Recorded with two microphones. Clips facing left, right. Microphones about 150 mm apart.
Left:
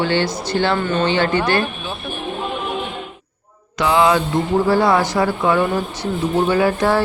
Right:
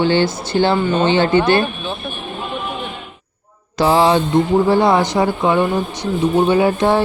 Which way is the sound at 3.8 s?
35° right (ahead or behind).